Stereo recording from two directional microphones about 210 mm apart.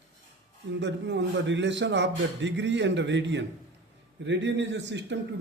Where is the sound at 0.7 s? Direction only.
60° right (ahead or behind).